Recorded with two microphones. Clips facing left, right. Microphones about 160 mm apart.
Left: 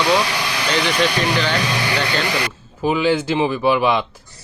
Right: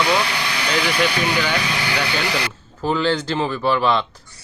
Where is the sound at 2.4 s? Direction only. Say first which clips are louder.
Left 3 dB; 10° left (ahead or behind).